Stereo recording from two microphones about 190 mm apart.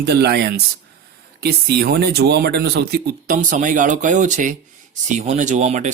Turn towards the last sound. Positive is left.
turn(degrees=-35)  # may be behind; listen again after turning